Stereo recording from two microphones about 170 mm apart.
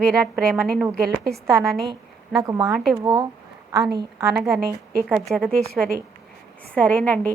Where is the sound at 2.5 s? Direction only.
20° right (ahead or behind).